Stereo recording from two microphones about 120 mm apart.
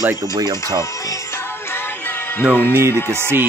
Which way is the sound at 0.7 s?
25° left (ahead or behind).